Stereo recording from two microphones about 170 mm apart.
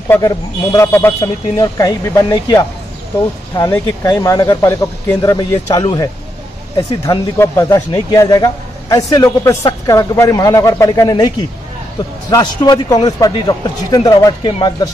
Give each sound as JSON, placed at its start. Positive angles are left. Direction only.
{"t": 0.7, "sound": "a man's voice", "side_deg": 20}
{"t": 7.1, "sound": "a man's voice", "side_deg": 20}